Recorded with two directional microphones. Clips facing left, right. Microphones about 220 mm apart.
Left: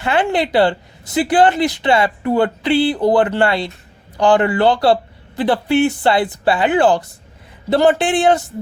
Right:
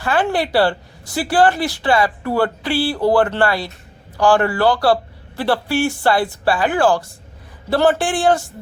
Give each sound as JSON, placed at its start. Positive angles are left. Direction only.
{"t": 0.0, "sound": "speech", "side_deg": 20}